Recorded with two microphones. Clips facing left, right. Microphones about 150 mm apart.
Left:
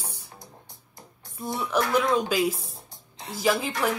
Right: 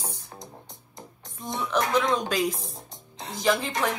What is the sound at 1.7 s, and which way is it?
Speech, 5° left (ahead or behind).